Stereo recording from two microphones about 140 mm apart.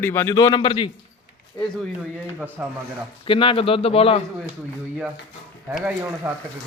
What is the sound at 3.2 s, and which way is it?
Speech, 40° left (ahead or behind).